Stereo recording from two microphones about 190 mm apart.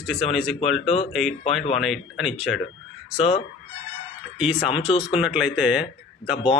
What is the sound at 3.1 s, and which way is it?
Fowl, 35° left (ahead or behind).